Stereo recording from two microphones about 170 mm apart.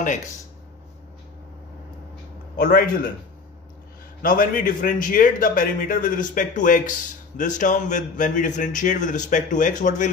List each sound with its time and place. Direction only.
2.5 s a man's voice: 60° left (ahead or behind)
4.2 s a man's voice: 55° left (ahead or behind)